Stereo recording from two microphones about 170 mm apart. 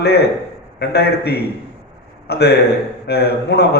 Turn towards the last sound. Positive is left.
turn(degrees=70)  # may be behind; listen again after turning